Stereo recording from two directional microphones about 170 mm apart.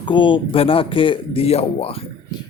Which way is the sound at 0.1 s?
30° left (ahead or behind).